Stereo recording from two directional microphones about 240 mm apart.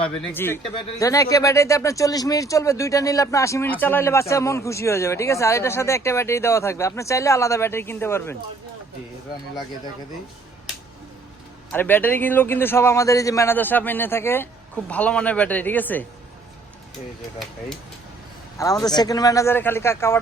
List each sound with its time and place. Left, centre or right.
0.0 s speech: centre
11.7 s speech: centre
18.5 s speech: centre